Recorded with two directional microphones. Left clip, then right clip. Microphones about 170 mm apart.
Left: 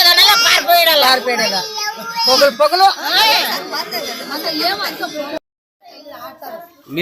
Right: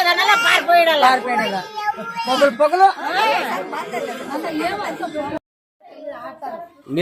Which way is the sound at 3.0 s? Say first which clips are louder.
Left 5 dB; 15° right (ahead or behind).